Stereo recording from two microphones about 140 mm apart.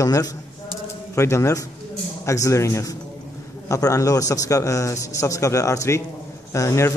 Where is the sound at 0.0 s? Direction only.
25° left (ahead or behind).